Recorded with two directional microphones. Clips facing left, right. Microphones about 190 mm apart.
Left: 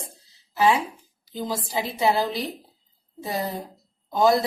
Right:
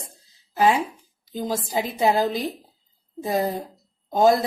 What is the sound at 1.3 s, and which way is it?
A woman's voice, 45° right (ahead or behind).